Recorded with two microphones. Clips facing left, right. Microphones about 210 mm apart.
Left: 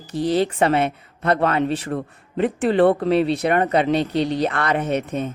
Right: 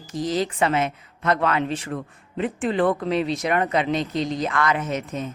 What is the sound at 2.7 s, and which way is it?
Speech, 65° left (ahead or behind).